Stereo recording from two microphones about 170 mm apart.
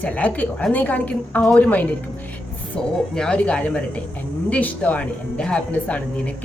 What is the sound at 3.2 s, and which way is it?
Speech, 5° left (ahead or behind).